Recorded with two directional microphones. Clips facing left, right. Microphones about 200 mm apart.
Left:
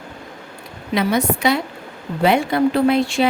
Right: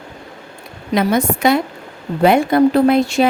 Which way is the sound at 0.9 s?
50° right (ahead or behind).